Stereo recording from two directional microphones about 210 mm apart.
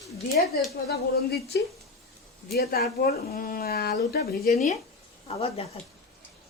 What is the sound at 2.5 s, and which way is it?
Speech, 50° left (ahead or behind).